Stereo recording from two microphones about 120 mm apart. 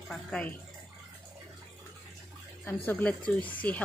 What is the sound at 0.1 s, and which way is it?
Speech, 5° left (ahead or behind).